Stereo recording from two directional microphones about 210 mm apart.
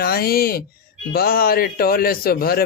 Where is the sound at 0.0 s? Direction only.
45° left (ahead or behind).